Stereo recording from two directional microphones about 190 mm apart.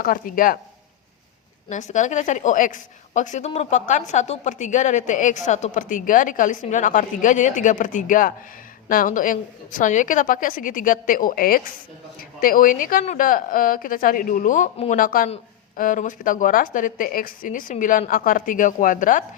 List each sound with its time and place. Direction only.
0.0 s a woman's voice: 50° left (ahead or behind)
1.7 s a woman's voice: 40° left (ahead or behind)